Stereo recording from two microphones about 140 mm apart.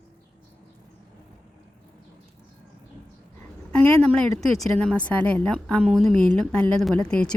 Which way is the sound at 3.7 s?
10° left (ahead or behind).